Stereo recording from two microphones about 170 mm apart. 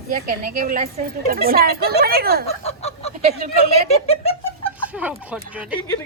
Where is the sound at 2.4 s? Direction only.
40° left (ahead or behind).